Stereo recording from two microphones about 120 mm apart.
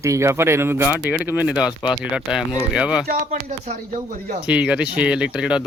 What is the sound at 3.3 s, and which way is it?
Speech, 70° right (ahead or behind).